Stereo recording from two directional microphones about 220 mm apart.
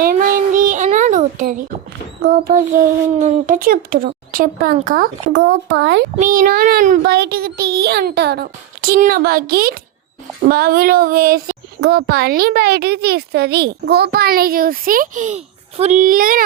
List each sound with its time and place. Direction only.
0.0 s child singing: 40° right (ahead or behind)
2.2 s speech: 45° right (ahead or behind)
5.3 s speech: 55° right (ahead or behind)
6.1 s speech: 40° right (ahead or behind)